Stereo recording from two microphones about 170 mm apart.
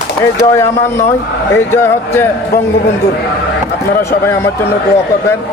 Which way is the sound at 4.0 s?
15° left (ahead or behind).